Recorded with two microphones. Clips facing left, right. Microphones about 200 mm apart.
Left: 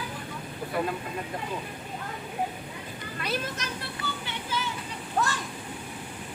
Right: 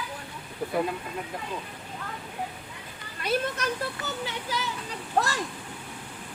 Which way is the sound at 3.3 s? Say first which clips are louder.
Right 6 dB; 45° right (ahead or behind).